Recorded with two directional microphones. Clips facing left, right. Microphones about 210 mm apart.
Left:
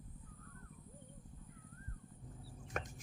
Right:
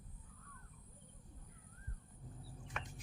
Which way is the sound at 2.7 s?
45° left (ahead or behind).